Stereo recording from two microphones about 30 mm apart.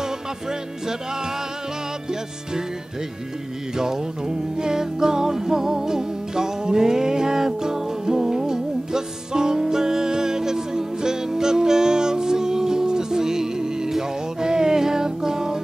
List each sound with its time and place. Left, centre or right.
0.0 s music: centre
3.7 s music: right